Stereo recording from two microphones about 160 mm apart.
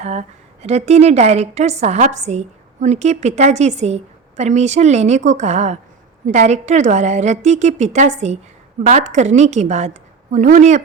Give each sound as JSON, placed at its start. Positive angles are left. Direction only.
{"t": 0.0, "sound": "a woman's voice", "side_deg": -45}